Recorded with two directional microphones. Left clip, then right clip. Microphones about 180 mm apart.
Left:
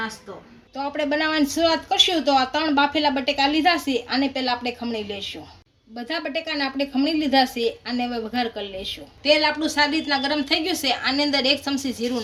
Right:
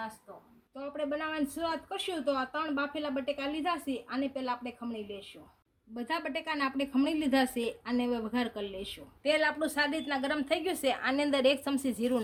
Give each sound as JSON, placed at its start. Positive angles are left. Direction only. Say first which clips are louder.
{"t": 0.9, "sound": "speech", "louder": "left 12 dB", "side_deg": -50}